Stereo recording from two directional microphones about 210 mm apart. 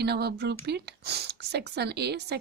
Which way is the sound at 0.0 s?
50° right (ahead or behind).